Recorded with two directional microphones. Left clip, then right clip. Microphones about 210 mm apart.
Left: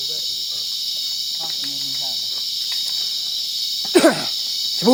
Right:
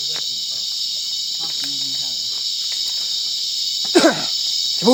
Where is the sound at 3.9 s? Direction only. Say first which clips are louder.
Even; 35° left (ahead or behind).